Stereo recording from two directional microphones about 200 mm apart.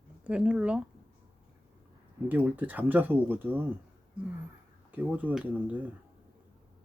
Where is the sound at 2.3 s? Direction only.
10° right (ahead or behind).